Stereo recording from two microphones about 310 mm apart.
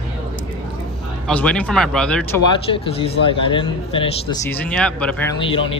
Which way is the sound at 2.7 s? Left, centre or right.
Centre.